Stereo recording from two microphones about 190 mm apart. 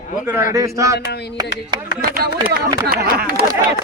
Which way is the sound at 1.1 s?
60° left (ahead or behind).